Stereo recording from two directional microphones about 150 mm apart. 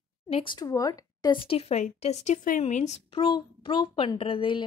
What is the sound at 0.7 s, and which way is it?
Speech, 25° left (ahead or behind).